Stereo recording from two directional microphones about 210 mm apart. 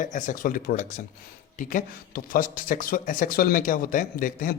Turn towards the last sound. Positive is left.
turn(degrees=40)  # may be behind; listen again after turning